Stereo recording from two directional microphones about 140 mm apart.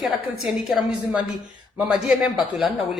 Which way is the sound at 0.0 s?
Centre (ahead or behind).